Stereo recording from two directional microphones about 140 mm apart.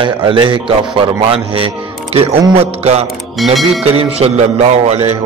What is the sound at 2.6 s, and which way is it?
Music, 50° right (ahead or behind).